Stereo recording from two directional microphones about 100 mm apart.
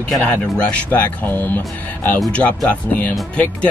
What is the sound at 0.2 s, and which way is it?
Speech, 15° left (ahead or behind).